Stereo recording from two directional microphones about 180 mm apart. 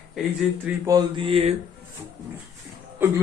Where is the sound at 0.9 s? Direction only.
25° right (ahead or behind).